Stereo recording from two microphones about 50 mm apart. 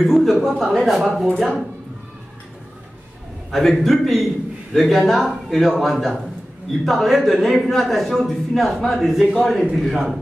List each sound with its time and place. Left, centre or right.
0.0 s speech: centre
3.5 s a man's voice: centre